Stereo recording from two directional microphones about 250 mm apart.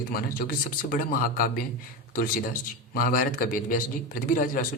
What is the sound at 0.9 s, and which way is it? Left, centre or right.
A man's voice, left.